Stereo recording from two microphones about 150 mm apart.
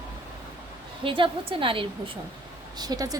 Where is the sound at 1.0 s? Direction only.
35° right (ahead or behind).